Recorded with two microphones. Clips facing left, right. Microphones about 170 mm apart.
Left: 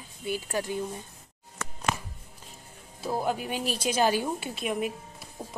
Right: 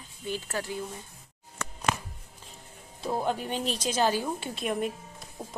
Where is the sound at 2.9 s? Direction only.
5° left (ahead or behind).